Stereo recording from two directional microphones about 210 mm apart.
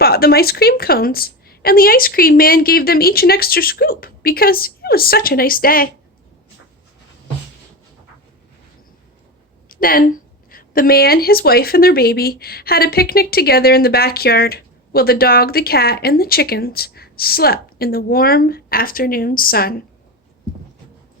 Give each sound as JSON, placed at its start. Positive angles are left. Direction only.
{"t": 0.0, "sound": "a woman's voice", "side_deg": 45}
{"t": 9.6, "sound": "a woman's voice", "side_deg": 45}